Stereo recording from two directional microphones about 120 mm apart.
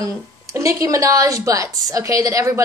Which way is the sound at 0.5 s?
25° right (ahead or behind).